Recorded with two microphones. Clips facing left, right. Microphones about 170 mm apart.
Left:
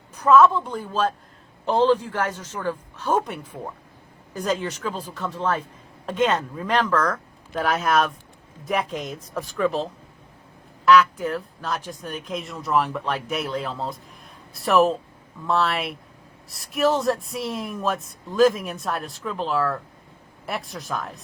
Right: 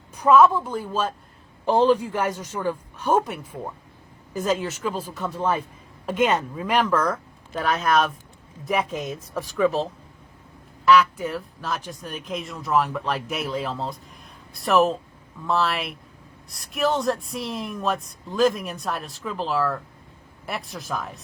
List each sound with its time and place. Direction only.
0.2 s a man's voice: 10° right (ahead or behind)
7.6 s speech: centre (ahead or behind)
10.8 s speech: centre (ahead or behind)